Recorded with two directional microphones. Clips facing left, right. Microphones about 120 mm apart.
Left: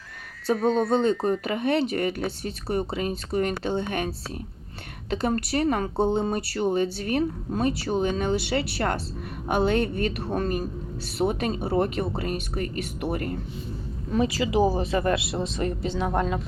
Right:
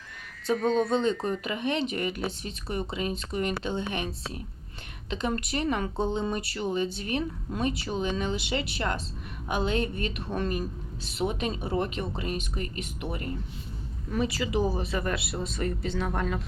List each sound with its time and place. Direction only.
0.5 s speech: 5° left (ahead or behind)
0.9 s speech: 40° left (ahead or behind)
14.1 s a woman's voice: 30° left (ahead or behind)